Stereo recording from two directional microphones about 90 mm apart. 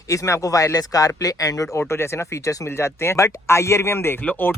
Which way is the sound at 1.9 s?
30° left (ahead or behind).